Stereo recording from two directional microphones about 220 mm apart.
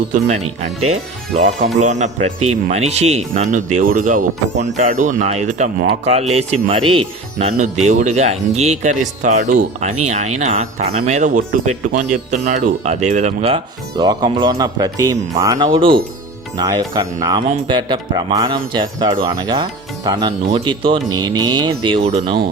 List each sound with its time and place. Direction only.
0.1 s speech: 30° right (ahead or behind)
1.8 s speech: 30° right (ahead or behind)
17.2 s speech: 20° right (ahead or behind)